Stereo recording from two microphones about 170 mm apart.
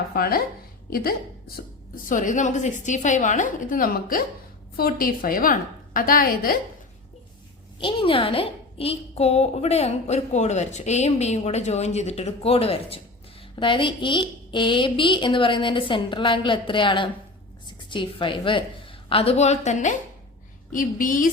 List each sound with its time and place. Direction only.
0.1 s a woman's voice: 60° left (ahead or behind)
7.8 s a woman's voice: 30° left (ahead or behind); by 21.2 s 50° left (ahead or behind)